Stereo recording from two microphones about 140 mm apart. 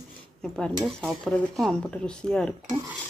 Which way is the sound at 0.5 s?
Centre (ahead or behind).